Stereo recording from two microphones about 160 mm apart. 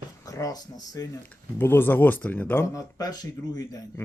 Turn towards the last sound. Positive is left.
turn(degrees=20)  # may be behind; listen again after turning